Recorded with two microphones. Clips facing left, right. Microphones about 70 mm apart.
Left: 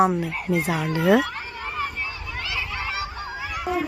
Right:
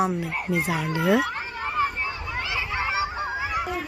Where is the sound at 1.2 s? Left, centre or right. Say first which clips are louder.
Right 2 dB; centre.